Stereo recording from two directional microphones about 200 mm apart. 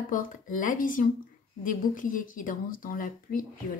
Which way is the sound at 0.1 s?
40° left (ahead or behind).